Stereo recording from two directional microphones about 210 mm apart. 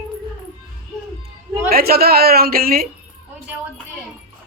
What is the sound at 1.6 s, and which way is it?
A woman's voice, 45° right (ahead or behind).